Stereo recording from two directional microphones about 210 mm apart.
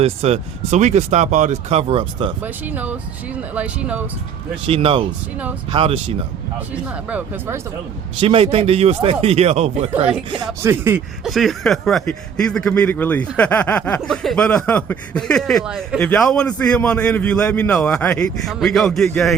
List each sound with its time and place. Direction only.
0.0 s speech: 30° right (ahead or behind)
2.4 s speech: 10° right (ahead or behind)
4.6 s speech: 25° right (ahead or behind)
6.8 s speech: 5° right (ahead or behind)
8.2 s speech: 25° right (ahead or behind)
10.3 s speech: 15° right (ahead or behind); by 19.4 s 5° left (ahead or behind)